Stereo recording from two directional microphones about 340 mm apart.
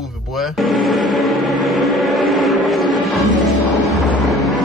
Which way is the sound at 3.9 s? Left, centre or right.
Centre.